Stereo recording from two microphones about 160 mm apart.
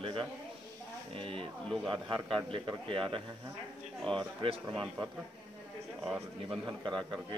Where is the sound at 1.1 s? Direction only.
35° right (ahead or behind).